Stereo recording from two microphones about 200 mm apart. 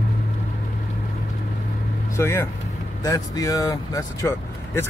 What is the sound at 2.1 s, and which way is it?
Speech, 15° left (ahead or behind).